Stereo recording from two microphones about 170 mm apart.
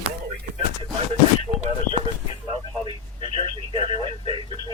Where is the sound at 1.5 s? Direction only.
30° right (ahead or behind).